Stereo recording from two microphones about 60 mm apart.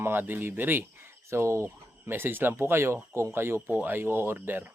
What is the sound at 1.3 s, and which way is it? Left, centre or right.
Speech, right.